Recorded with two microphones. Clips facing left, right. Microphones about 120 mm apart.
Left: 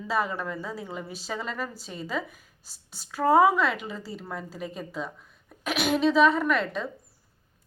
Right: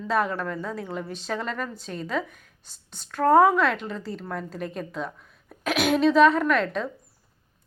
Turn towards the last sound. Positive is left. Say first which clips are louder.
# right 3 dB
turn(degrees=0)  # may be behind; listen again after turning